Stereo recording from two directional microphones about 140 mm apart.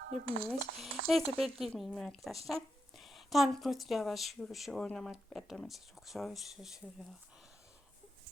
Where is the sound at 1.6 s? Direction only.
5° left (ahead or behind).